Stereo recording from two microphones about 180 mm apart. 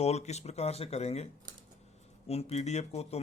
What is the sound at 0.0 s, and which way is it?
A man's voice, 35° left (ahead or behind).